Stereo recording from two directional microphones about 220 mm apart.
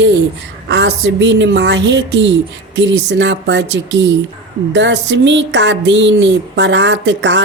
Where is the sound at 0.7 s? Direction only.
55° right (ahead or behind).